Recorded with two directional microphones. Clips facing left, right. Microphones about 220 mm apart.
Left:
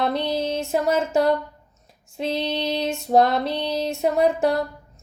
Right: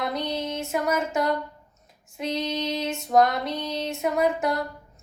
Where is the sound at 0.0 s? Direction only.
30° left (ahead or behind).